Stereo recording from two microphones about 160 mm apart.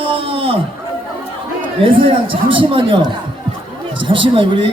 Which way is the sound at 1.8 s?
35° right (ahead or behind).